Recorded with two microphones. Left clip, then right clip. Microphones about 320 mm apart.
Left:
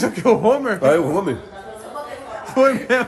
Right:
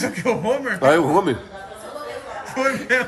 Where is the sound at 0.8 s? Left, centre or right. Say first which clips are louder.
Right 2 dB; centre.